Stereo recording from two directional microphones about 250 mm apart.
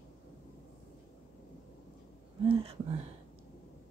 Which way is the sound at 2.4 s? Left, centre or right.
Right.